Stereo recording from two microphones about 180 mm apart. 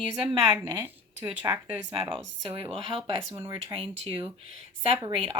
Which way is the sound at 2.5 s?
30° right (ahead or behind).